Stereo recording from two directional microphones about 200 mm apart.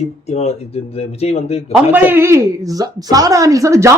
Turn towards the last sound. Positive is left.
turn(degrees=-15)  # may be behind; listen again after turning